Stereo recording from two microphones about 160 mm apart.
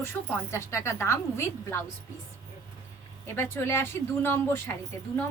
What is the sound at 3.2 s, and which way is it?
Speech, 15° left (ahead or behind).